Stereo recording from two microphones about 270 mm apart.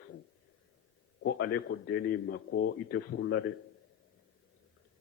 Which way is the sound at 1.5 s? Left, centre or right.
Left.